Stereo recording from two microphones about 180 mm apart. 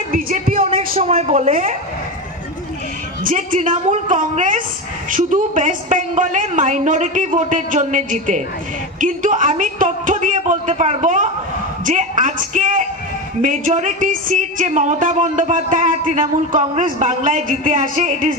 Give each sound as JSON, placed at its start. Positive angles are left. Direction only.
{"t": 0.1, "sound": "speech", "side_deg": -50}
{"t": 0.6, "sound": "a man's voice", "side_deg": -30}
{"t": 3.3, "sound": "speech", "side_deg": -45}